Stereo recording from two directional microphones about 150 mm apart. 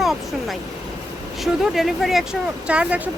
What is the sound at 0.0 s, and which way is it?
Vehicle, centre (ahead or behind).